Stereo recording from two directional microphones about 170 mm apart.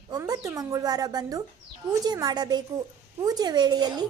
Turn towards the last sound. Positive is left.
turn(degrees=-25)  # may be behind; listen again after turning